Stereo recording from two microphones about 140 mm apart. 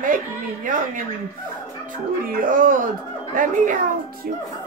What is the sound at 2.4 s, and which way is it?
Speech, 70° right (ahead or behind).